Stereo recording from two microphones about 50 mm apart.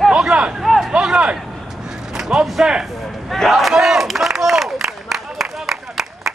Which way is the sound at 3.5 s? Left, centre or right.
Centre.